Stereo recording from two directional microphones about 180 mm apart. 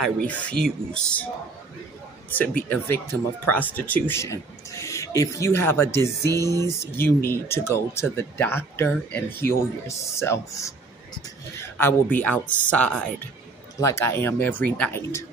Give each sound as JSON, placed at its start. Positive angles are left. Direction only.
{"t": 0.0, "sound": "speech", "side_deg": 5}
{"t": 2.7, "sound": "speech", "side_deg": 10}
{"t": 6.3, "sound": "music", "side_deg": -20}
{"t": 6.6, "sound": "speech", "side_deg": 15}